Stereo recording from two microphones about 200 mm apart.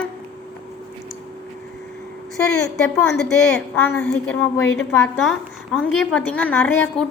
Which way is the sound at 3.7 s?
10° left (ahead or behind).